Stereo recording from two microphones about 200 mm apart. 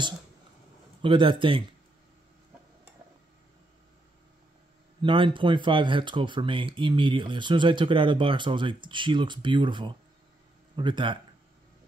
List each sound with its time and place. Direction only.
1.0 s speech: 25° right (ahead or behind)
5.0 s speech: 25° right (ahead or behind)